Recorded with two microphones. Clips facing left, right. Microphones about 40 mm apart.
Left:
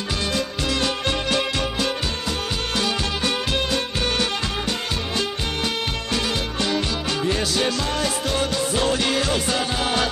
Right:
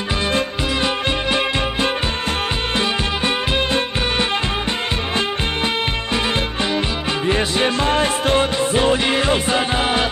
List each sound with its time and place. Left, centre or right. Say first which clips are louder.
0.8 s music: right 3 dB; right
7.2 s music: right 5 dB; right